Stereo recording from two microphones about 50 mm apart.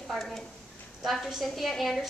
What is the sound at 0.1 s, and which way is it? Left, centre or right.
A woman's voice, centre.